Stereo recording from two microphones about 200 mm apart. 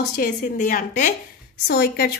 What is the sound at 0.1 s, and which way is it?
A woman's voice, 45° left (ahead or behind).